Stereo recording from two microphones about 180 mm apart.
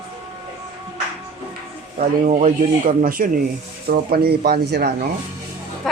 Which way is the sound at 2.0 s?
40° right (ahead or behind).